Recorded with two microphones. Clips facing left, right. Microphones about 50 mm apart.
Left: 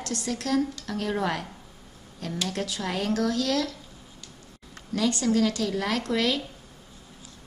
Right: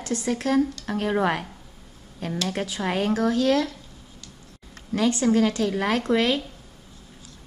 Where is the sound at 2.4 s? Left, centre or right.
Right.